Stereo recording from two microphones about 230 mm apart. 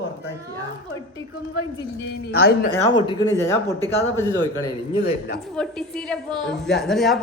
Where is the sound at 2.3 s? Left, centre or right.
Left.